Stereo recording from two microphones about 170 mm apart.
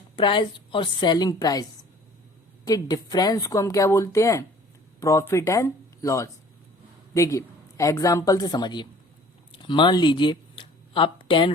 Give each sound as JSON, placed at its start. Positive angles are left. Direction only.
{"t": 0.2, "sound": "speech", "side_deg": 30}
{"t": 2.6, "sound": "speech", "side_deg": 20}